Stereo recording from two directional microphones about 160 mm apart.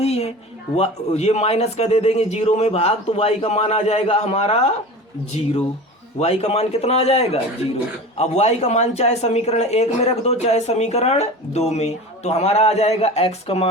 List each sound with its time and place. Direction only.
0.0 s music: 40° left (ahead or behind)
0.8 s speech: 40° left (ahead or behind)